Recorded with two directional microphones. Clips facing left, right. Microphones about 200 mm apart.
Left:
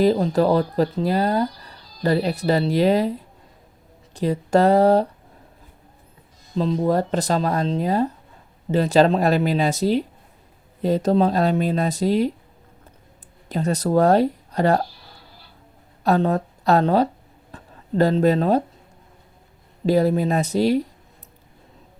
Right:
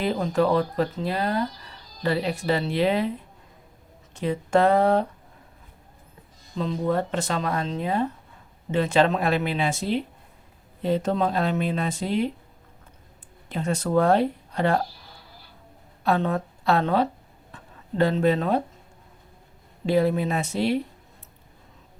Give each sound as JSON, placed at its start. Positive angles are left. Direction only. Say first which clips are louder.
{"t": 0.0, "sound": "speech", "louder": "left 5 dB", "side_deg": 35}
{"t": 6.6, "sound": "speech", "louder": "left 5 dB", "side_deg": 35}
{"t": 13.5, "sound": "speech", "louder": "left 4 dB", "side_deg": 40}
{"t": 16.0, "sound": "speech", "louder": "left 4 dB", "side_deg": 40}
{"t": 19.8, "sound": "speech", "louder": "left 3 dB", "side_deg": 40}